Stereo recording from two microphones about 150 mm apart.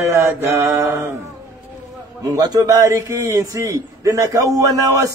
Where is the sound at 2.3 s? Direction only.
25° right (ahead or behind).